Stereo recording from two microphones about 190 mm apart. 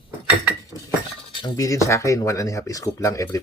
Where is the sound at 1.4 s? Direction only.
20° left (ahead or behind).